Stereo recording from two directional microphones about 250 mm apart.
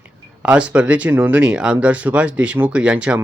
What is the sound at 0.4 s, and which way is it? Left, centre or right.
Speech, centre.